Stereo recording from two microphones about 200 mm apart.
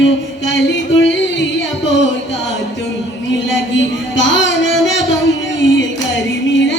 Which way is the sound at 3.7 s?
65° left (ahead or behind).